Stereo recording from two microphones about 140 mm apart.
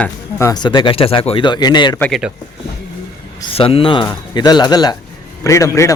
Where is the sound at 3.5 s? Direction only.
40° left (ahead or behind); by 5.9 s 20° left (ahead or behind).